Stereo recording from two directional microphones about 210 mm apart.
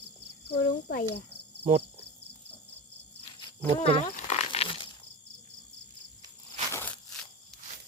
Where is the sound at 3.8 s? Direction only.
30° left (ahead or behind).